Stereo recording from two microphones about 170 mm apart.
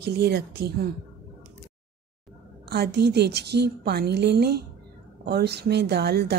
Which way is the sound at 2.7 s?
70° right (ahead or behind).